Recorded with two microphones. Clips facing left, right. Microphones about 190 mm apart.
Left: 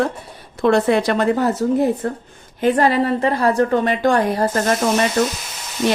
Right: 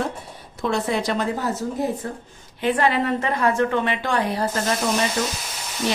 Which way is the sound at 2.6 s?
40° left (ahead or behind).